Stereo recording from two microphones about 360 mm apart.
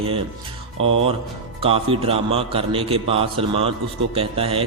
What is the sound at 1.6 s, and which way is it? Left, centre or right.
A man's voice, centre.